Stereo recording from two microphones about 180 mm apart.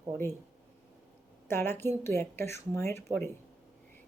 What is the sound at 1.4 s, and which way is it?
A woman's voice, 10° left (ahead or behind).